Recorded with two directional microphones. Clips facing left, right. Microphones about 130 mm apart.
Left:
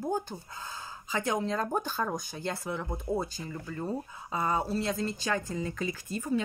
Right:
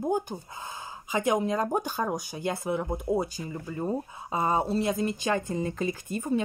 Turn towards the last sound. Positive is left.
turn(degrees=-20)  # may be behind; listen again after turning